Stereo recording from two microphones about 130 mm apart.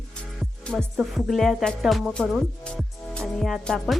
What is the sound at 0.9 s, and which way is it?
Speech, centre (ahead or behind).